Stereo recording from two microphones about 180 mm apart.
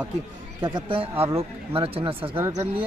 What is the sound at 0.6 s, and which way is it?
A woman's voice, 25° right (ahead or behind).